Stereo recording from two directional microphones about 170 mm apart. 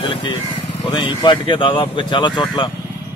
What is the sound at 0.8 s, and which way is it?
A man's voice, 30° left (ahead or behind).